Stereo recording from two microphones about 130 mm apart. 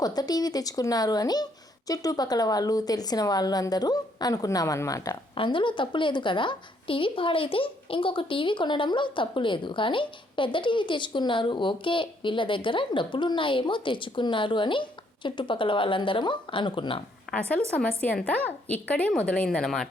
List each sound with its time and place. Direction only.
0.0 s a woman's voice: 30° left (ahead or behind)
5.3 s a woman's voice: 40° left (ahead or behind)
17.5 s a woman's voice: 10° left (ahead or behind)